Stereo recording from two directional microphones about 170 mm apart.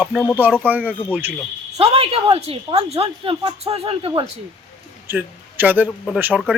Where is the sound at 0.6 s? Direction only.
10° right (ahead or behind).